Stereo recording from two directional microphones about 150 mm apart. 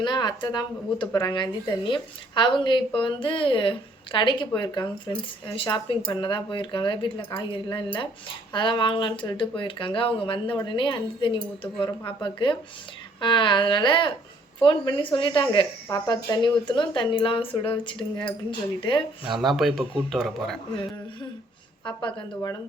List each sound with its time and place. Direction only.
0.0 s speech: 30° left (ahead or behind)
19.2 s speech: centre (ahead or behind)